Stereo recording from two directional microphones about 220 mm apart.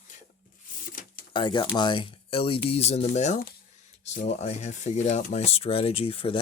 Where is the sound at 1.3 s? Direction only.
20° left (ahead or behind).